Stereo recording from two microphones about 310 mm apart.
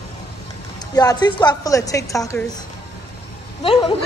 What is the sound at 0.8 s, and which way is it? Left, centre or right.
A woman's voice, centre.